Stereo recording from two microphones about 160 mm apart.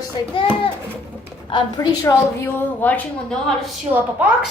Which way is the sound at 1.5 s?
20° left (ahead or behind).